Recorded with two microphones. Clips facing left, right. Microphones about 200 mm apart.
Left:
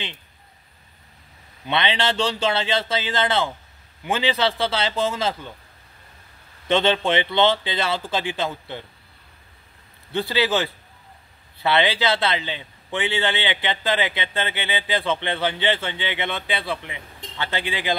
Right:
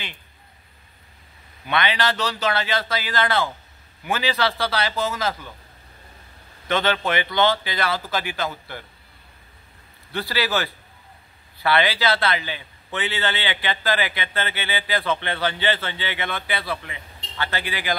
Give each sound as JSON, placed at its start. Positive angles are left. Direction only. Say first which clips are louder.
{"t": 1.7, "sound": "a man's voice", "louder": "even", "side_deg": 25}
{"t": 6.7, "sound": "a man's voice", "louder": "left 3 dB", "side_deg": 25}
{"t": 10.1, "sound": "a man's voice", "louder": "left 3 dB", "side_deg": 20}